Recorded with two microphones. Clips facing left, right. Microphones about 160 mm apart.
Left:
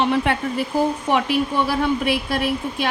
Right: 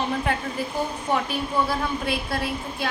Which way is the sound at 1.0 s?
90° left.